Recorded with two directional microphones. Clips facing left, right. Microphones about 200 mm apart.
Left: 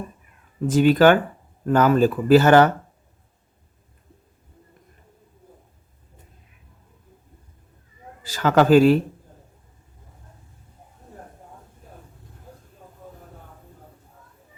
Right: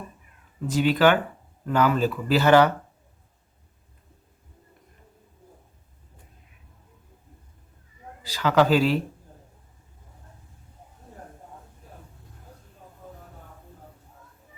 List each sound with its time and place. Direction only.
0.7 s speech: 50° left (ahead or behind)
8.2 s speech: 50° left (ahead or behind)